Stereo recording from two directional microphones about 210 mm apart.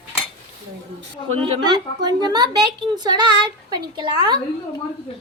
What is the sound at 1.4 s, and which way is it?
A woman's voice, 20° right (ahead or behind).